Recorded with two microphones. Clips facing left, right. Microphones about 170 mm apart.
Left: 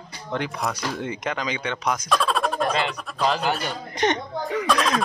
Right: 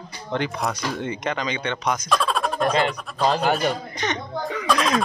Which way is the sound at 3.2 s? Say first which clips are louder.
Right 2 dB; 35° right (ahead or behind).